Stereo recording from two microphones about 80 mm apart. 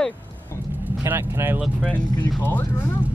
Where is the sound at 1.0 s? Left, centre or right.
Right.